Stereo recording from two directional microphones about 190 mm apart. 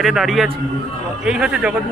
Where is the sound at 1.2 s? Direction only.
5° right (ahead or behind).